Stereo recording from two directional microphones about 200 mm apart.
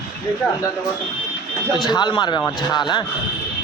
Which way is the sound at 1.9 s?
20° left (ahead or behind).